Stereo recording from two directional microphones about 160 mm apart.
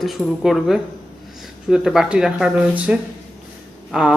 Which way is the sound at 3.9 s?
5° right (ahead or behind).